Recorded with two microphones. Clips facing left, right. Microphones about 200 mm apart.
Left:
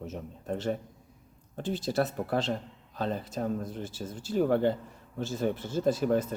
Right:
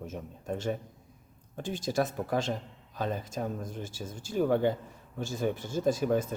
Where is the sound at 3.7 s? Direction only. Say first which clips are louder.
Left 2 dB; 10° right (ahead or behind).